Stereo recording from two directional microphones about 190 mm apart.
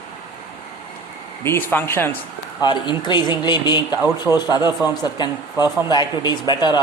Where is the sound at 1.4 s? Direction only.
10° left (ahead or behind).